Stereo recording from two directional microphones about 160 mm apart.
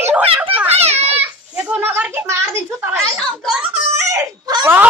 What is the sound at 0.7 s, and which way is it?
Children playing, 40° right (ahead or behind).